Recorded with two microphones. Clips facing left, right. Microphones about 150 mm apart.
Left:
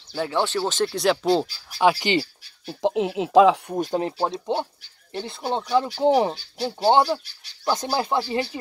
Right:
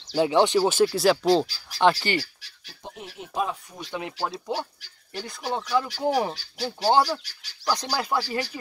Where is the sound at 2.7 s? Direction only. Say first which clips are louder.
Left 18 dB; 90° left.